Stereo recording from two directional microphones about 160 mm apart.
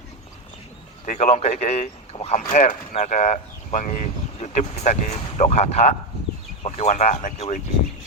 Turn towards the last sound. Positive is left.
turn(degrees=50)  # may be behind; listen again after turning